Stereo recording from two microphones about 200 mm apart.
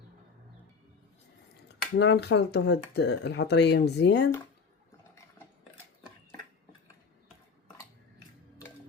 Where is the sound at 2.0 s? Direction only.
60° left (ahead or behind).